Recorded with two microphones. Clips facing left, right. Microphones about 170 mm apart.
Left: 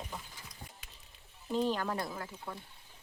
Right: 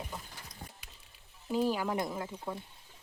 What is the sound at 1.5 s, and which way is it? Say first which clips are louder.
Speech: right 2 dB; 10° right (ahead or behind).